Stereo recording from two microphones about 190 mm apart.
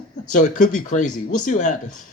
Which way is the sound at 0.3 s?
40° left (ahead or behind).